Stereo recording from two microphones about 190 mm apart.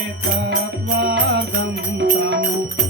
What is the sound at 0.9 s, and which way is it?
Music, 65° right (ahead or behind).